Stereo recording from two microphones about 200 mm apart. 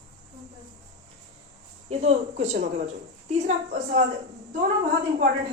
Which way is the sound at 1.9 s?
35° right (ahead or behind).